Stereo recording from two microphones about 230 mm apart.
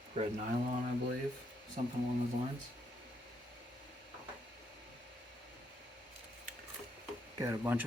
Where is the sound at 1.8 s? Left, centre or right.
Right.